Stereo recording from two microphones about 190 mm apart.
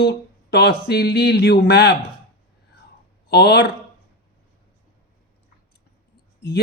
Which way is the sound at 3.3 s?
60° left (ahead or behind).